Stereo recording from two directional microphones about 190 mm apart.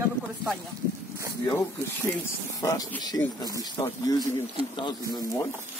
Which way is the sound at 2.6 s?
15° left (ahead or behind).